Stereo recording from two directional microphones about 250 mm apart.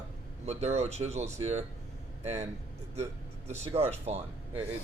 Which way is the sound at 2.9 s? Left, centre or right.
Right.